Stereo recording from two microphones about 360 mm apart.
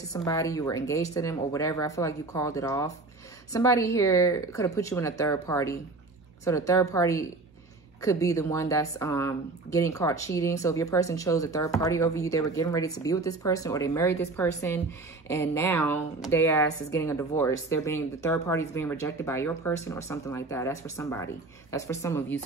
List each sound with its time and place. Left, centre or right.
0.1 s speech: centre